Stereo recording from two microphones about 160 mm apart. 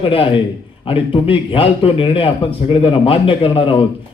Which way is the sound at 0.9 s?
35° left (ahead or behind).